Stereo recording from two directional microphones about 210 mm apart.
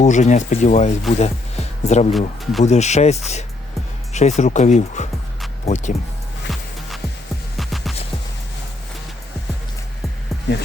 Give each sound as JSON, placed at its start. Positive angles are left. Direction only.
{"t": 0.0, "sound": "speech", "side_deg": 35}
{"t": 2.1, "sound": "speech", "side_deg": 0}
{"t": 2.6, "sound": "speech", "side_deg": 35}
{"t": 6.5, "sound": "music", "side_deg": 0}